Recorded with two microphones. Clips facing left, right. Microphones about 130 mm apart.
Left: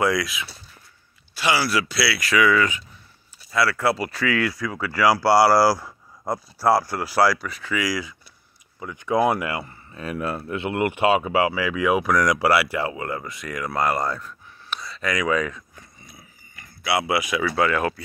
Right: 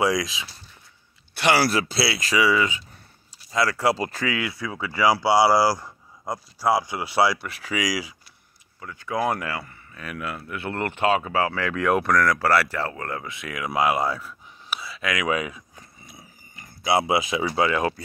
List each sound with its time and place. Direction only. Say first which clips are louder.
0.1 s speech: left 1 dB; 35° right (ahead or behind)
1.3 s speech: right 2 dB; 55° right (ahead or behind)
1.9 s speech: left 1 dB; 25° right (ahead or behind)
3.6 s speech: left 2 dB; 40° right (ahead or behind)
4.2 s speech: left 4 dB; 20° right (ahead or behind)
5.9 s a sound: left 4 dB; 5° left (ahead or behind)
6.6 s speech: left 2 dB; 15° right (ahead or behind)
7.2 s speech: left 2 dB; centre (ahead or behind)
7.6 s speech: left 1 dB; 15° right (ahead or behind)
8.7 s speech: left 6 dB; 20° left (ahead or behind)
10.6 s speech: left 3 dB; 15° left (ahead or behind)
12.2 s speech: left 1 dB; 15° left (ahead or behind); by 15.2 s 5° right (ahead or behind)
15.2 s a sound: left 2 dB; 10° right (ahead or behind)
16.5 s speech: right 2 dB; 25° right (ahead or behind)